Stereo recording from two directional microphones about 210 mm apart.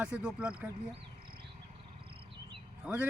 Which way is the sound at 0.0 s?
5° right (ahead or behind).